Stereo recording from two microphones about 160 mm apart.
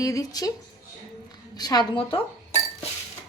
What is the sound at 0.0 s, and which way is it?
Speech, 20° left (ahead or behind).